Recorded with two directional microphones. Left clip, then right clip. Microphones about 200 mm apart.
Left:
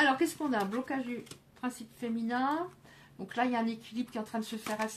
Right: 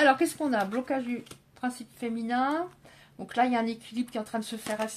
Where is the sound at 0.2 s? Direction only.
40° right (ahead or behind).